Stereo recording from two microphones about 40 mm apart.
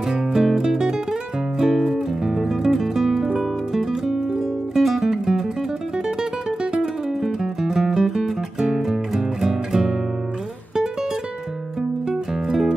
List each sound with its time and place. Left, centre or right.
0.1 s music: centre
6.6 s music: centre
12.1 s music: centre